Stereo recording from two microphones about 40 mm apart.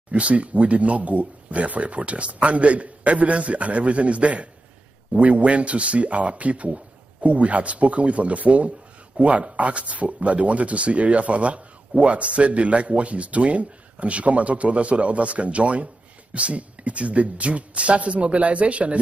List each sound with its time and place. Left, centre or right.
0.1 s speech: right